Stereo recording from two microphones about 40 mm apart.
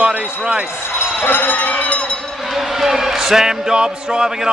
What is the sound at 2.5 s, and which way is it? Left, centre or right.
Speech, centre.